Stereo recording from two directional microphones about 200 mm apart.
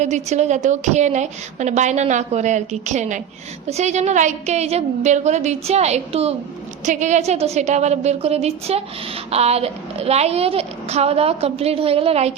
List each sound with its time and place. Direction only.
0.0 s a woman's voice: 35° right (ahead or behind)